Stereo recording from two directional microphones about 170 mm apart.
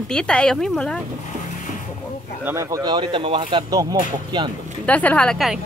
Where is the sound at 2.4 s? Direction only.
15° right (ahead or behind).